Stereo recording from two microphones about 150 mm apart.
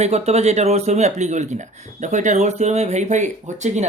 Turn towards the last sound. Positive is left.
turn(degrees=-50)  # may be behind; listen again after turning